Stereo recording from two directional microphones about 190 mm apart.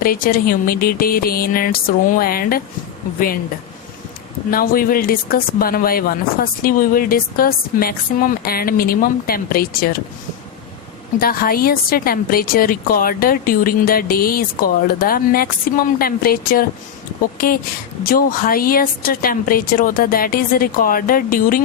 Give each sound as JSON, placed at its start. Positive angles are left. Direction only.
{"t": 0.0, "sound": "speech", "side_deg": 50}
{"t": 4.5, "sound": "speech", "side_deg": 50}
{"t": 11.2, "sound": "speech", "side_deg": 50}